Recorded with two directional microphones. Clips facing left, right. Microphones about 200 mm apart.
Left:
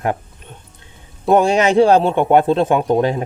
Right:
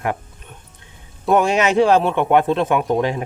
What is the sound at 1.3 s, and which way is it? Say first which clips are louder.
Speech: left 3 dB; 30° left (ahead or behind).